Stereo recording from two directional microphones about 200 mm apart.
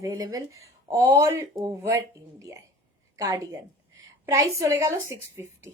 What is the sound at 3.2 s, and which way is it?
A woman's voice, 15° right (ahead or behind).